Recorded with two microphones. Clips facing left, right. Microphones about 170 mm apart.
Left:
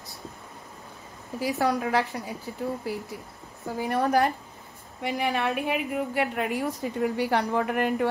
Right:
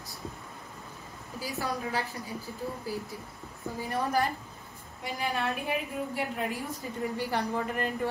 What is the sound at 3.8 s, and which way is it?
A woman's voice, 65° left (ahead or behind).